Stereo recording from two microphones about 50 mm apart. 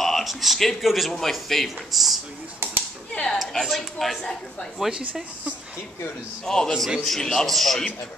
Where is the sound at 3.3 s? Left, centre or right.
Centre.